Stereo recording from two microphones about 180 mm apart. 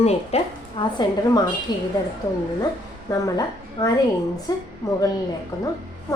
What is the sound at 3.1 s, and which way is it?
A woman's voice, 20° left (ahead or behind).